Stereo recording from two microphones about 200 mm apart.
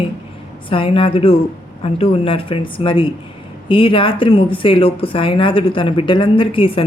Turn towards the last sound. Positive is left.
turn(degrees=25)  # may be behind; listen again after turning